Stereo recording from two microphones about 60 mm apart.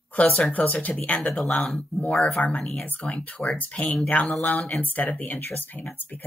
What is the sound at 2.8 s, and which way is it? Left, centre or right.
Speech, left.